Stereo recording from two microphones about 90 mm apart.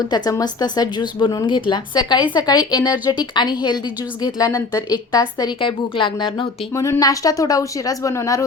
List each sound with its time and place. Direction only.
0.0 s speech: 45° left (ahead or behind)
4.2 s speech: 40° left (ahead or behind)
5.5 s speech: 65° left (ahead or behind)
7.0 s speech: 40° left (ahead or behind)